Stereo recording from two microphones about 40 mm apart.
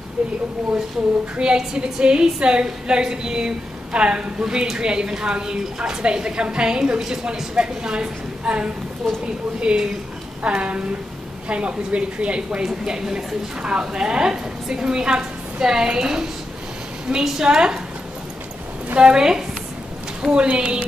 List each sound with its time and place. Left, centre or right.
0.2 s a woman's voice: right
12.6 s a woman's voice: centre
18.9 s a woman's voice: centre
20.2 s a woman's voice: right